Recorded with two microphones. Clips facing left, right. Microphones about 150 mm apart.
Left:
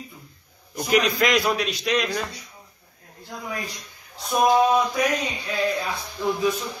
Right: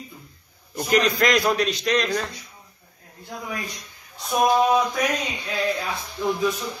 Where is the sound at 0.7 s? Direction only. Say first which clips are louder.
Even; centre (ahead or behind).